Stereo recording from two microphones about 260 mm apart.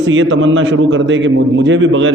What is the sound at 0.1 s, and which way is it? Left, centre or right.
A man's voice, right.